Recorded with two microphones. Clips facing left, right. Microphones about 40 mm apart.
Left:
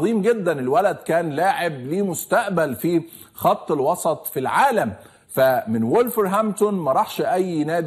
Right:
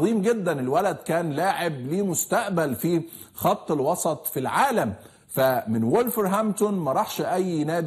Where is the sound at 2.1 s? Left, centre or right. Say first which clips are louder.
Left 4 dB; centre.